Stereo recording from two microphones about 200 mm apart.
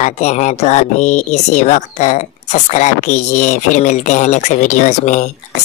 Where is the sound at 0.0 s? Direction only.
35° left (ahead or behind).